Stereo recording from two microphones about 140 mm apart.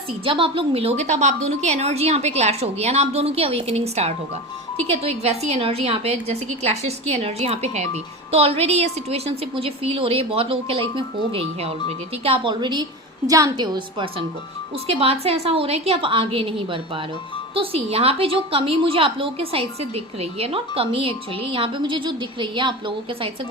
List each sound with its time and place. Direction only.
0.3 s a woman's voice: 40° right (ahead or behind)